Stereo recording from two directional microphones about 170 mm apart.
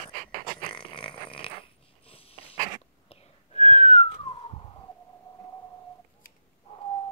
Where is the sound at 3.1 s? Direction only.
35° left (ahead or behind).